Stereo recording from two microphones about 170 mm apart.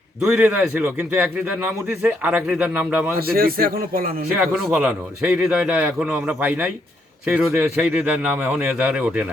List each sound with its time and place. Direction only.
0.2 s a man's voice: 10° right (ahead or behind)
3.2 s a man's voice: 60° right (ahead or behind)
4.3 s a man's voice: centre (ahead or behind)